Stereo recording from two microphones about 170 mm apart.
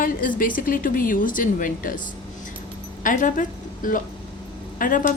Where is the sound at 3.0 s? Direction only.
50° left (ahead or behind).